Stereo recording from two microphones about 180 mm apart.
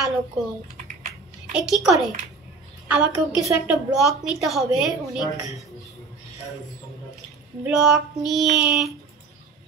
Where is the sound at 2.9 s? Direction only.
10° right (ahead or behind).